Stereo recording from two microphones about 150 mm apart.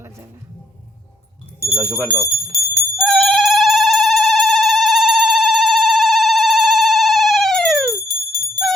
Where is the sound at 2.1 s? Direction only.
Centre (ahead or behind).